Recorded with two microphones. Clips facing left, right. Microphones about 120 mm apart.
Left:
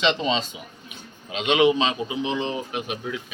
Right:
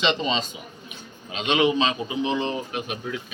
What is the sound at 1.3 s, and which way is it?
A man's voice, 10° left (ahead or behind).